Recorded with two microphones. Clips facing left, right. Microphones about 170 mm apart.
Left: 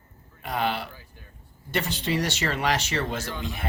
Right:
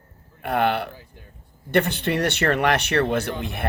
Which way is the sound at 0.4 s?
60° right (ahead or behind).